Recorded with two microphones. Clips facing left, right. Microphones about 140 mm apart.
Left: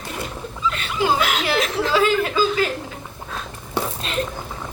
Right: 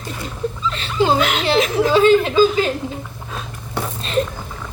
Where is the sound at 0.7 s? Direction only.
30° right (ahead or behind).